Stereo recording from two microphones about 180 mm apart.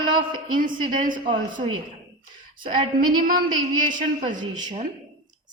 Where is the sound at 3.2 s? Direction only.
50° right (ahead or behind).